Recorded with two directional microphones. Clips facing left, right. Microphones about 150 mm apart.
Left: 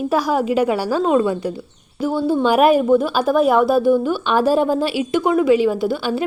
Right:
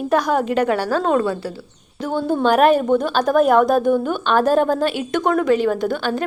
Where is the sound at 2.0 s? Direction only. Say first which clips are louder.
Left 2 dB; 5° left (ahead or behind).